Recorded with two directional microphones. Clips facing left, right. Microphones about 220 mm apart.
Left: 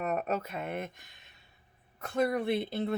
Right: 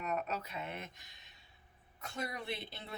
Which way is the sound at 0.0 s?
55° left (ahead or behind).